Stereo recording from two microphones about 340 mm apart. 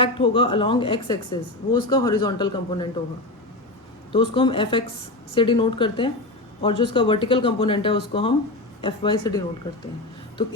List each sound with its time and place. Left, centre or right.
0.0 s a woman's voice: centre
4.1 s a woman's voice: centre